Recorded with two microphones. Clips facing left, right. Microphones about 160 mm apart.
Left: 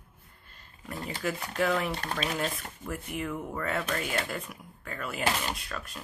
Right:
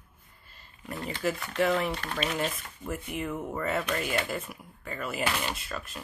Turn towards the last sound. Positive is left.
turn(degrees=0)  # may be behind; listen again after turning